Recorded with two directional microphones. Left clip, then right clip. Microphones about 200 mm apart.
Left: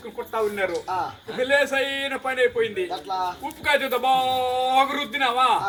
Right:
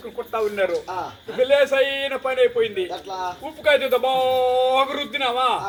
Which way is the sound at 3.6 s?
15° left (ahead or behind).